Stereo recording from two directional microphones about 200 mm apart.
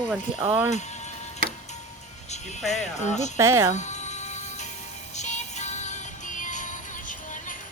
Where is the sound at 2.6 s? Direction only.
35° left (ahead or behind).